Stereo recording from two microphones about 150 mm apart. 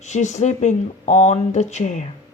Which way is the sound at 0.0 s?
50° left (ahead or behind).